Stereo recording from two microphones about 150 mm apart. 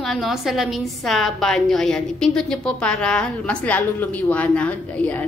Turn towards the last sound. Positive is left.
turn(degrees=10)  # may be behind; listen again after turning